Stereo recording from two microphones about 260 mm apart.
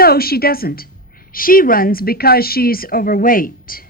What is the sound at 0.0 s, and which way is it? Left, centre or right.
A woman's voice, left.